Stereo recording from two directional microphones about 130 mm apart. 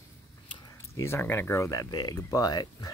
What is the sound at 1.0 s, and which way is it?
Speech, 20° left (ahead or behind).